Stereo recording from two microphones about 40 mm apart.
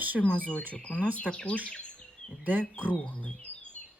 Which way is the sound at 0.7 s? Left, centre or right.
Left.